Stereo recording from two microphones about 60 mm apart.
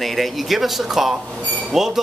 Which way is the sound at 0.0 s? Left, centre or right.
Centre.